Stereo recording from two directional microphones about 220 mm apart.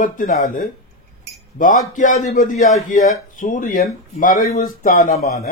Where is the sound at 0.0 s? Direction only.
35° left (ahead or behind).